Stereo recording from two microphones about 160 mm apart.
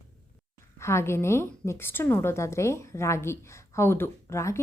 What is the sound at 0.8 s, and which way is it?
A woman's voice, 15° left (ahead or behind).